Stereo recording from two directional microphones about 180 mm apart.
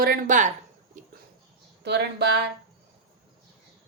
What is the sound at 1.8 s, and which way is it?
Speech, 70° right (ahead or behind).